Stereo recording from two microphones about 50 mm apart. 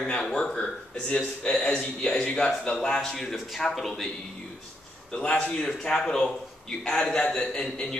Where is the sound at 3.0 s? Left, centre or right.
Centre.